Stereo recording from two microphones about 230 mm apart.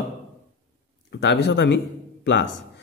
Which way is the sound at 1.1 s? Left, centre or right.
Left.